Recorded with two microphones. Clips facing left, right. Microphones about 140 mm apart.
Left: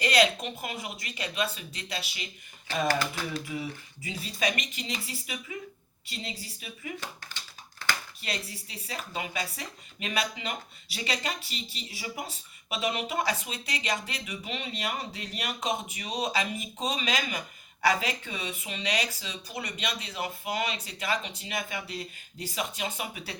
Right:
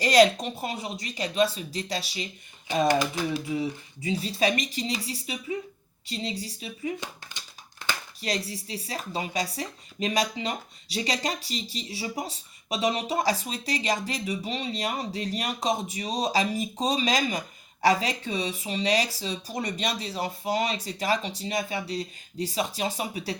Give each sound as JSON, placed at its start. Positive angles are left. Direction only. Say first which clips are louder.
{"t": 0.0, "sound": "speech", "louder": "right 6 dB", "side_deg": -40}
{"t": 2.8, "sound": "speech", "louder": "right 5 dB", "side_deg": -20}
{"t": 3.4, "sound": "speech", "louder": "right 6 dB", "side_deg": -25}
{"t": 7.0, "sound": "a sound", "louder": "right 1 dB", "side_deg": -20}
{"t": 8.2, "sound": "speech", "louder": "right 6 dB", "side_deg": -35}